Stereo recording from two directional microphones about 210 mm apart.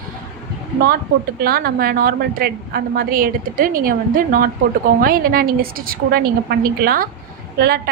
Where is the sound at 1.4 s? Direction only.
45° right (ahead or behind).